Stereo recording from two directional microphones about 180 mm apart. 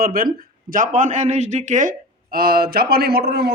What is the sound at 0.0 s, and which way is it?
Speech, 55° right (ahead or behind).